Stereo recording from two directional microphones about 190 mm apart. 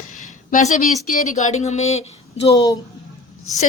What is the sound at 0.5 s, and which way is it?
Speech, 40° left (ahead or behind).